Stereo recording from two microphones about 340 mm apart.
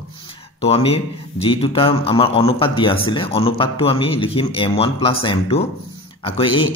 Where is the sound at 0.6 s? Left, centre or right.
Centre.